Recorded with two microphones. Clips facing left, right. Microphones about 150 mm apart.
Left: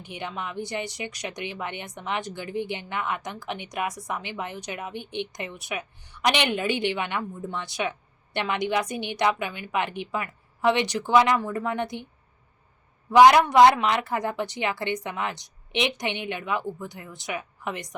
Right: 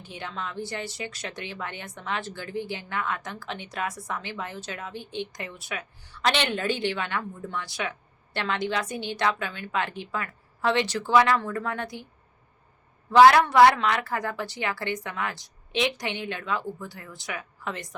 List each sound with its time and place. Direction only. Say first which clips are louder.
0.0 s speech: left 2 dB; 15° left (ahead or behind)
13.1 s a woman's voice: left 1 dB; 15° left (ahead or behind)